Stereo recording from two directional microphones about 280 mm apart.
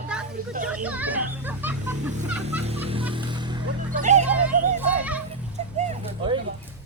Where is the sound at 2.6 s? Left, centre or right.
Right.